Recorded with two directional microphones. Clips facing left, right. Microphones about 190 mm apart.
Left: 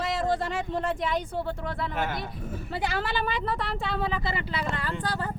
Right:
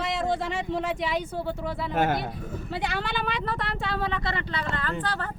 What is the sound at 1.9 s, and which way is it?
Speech, 45° right (ahead or behind).